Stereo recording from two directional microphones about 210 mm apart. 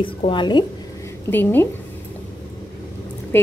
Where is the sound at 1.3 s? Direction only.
10° left (ahead or behind).